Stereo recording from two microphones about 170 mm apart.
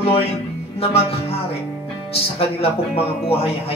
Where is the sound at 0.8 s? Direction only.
35° left (ahead or behind).